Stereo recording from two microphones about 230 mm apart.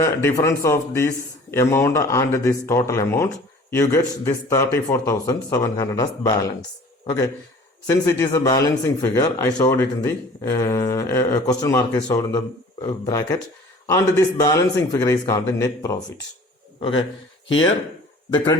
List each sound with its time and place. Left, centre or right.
0.0 s speech: centre